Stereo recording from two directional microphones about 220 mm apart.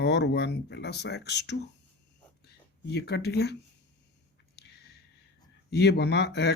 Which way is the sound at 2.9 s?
50° left (ahead or behind).